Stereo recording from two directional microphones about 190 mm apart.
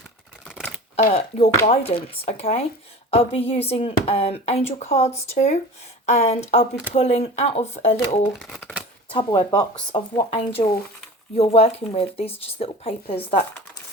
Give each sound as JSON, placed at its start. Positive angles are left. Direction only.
{"t": 0.4, "sound": "shuffling cards", "side_deg": 0}
{"t": 0.9, "sound": "speech", "side_deg": 35}
{"t": 8.4, "sound": "speech", "side_deg": 0}
{"t": 9.0, "sound": "speech", "side_deg": 25}